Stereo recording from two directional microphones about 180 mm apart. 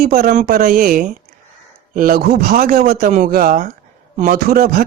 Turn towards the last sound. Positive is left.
turn(degrees=-55)  # may be behind; listen again after turning